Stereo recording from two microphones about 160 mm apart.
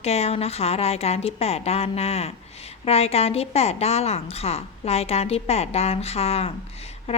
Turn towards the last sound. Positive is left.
turn(degrees=40)  # may be behind; listen again after turning